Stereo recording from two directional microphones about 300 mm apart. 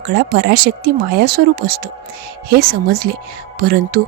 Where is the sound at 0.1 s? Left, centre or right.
Right.